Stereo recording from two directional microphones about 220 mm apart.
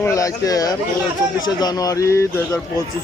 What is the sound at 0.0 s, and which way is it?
Speech, 15° left (ahead or behind).